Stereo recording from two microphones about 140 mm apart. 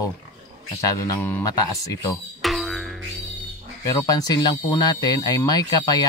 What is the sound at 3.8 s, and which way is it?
Speech, 25° left (ahead or behind).